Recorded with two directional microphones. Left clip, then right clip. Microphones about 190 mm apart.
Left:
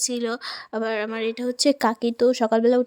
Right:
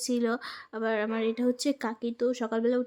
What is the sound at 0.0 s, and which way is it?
Speech, 40° left (ahead or behind).